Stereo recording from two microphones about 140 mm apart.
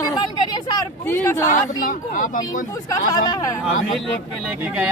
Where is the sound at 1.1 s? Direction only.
15° left (ahead or behind).